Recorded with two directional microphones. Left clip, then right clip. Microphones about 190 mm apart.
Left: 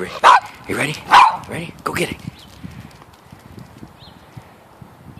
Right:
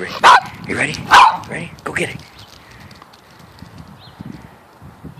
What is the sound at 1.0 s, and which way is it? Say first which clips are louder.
Dog: right 2 dB; centre (ahead or behind).